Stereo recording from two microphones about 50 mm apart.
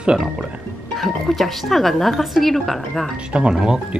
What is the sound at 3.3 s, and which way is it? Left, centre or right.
Speech, centre.